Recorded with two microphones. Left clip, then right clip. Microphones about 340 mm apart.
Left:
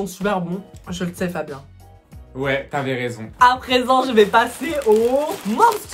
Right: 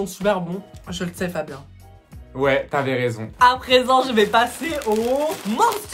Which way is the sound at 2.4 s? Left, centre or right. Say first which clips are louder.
Right 3 dB; centre.